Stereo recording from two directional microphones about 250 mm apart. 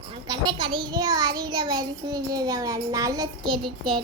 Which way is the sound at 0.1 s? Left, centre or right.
Centre.